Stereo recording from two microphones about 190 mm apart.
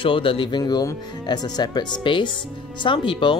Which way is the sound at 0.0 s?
25° left (ahead or behind).